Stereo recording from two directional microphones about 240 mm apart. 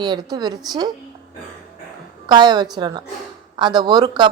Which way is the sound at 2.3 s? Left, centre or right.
Centre.